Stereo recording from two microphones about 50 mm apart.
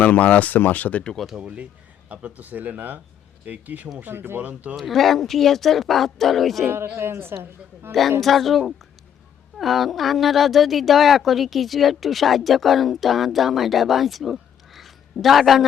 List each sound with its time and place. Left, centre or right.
0.0 s speech: left
2.0 s speech: right
4.0 s speech: right
4.4 s speech: right
4.8 s speech: centre
6.9 s speech: right
8.2 s speech: centre